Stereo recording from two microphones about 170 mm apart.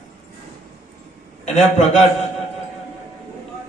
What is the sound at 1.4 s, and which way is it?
Speech, 40° left (ahead or behind).